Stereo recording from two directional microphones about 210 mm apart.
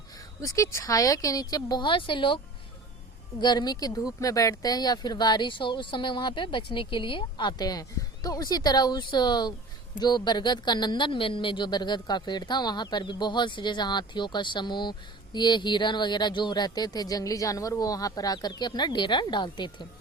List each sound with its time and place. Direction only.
0.4 s speech: 15° left (ahead or behind)
3.4 s speech: 20° left (ahead or behind)